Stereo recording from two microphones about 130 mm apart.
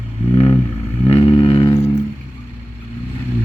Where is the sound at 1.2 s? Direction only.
40° left (ahead or behind).